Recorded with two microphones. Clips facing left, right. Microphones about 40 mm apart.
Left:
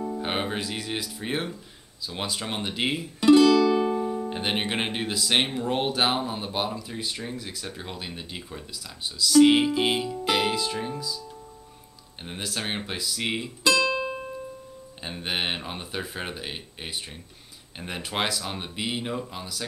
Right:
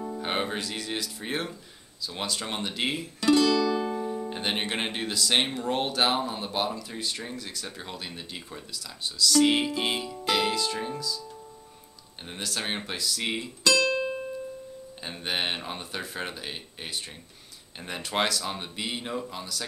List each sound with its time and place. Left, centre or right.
0.0 s speech: centre
12.3 s speech: centre
13.7 s music: left
15.0 s speech: centre